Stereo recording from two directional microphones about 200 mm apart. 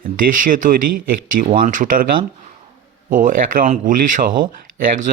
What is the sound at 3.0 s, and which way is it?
Speech, 45° right (ahead or behind).